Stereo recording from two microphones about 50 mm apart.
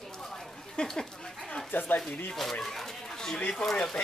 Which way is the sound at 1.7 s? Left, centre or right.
Left.